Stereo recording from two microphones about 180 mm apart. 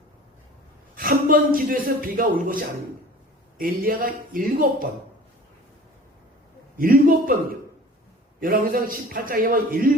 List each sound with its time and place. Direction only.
0.9 s a man's voice: 50° right (ahead or behind)
6.7 s a sound: 50° right (ahead or behind)
8.4 s a man's voice: 50° right (ahead or behind)